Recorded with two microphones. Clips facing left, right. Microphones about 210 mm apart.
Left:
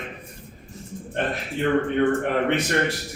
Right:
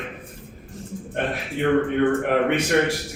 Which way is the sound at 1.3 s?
60° right (ahead or behind).